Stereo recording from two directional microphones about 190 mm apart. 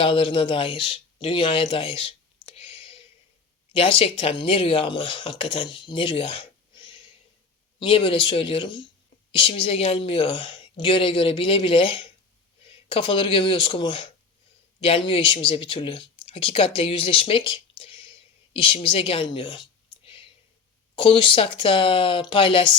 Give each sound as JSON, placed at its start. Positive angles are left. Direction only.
{"t": 0.0, "sound": "speech", "side_deg": 25}
{"t": 2.6, "sound": "a sound", "side_deg": 30}
{"t": 3.7, "sound": "speech", "side_deg": 30}
{"t": 20.9, "sound": "speech", "side_deg": 25}